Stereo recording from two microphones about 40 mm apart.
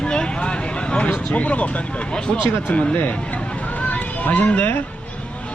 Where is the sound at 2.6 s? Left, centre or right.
Left.